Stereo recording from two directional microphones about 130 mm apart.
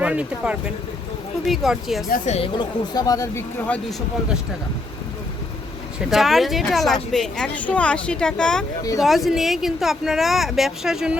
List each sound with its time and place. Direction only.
0.0 s speech: 10° right (ahead or behind)
2.1 s a woman's voice: 65° left (ahead or behind)
2.4 s speech: 35° left (ahead or behind)
6.1 s speech: centre (ahead or behind)